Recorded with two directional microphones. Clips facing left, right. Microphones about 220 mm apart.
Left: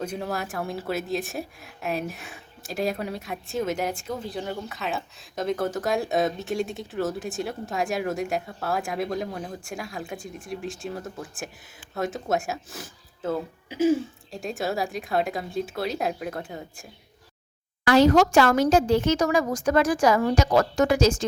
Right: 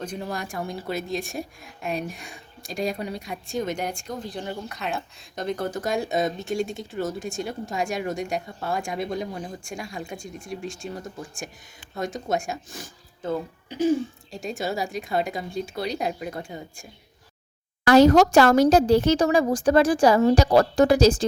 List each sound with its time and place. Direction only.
0.0 s speech: 5° left (ahead or behind)
17.8 s speech: 40° right (ahead or behind)